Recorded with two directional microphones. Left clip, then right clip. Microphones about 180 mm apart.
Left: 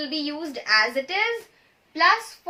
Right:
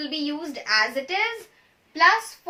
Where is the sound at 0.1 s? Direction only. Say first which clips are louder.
Even; 20° left (ahead or behind).